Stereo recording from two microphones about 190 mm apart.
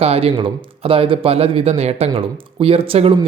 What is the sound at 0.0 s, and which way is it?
Speech, 30° right (ahead or behind).